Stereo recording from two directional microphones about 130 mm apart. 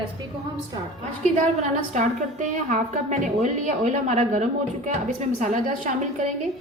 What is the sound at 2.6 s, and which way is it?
A woman's voice, 70° right (ahead or behind).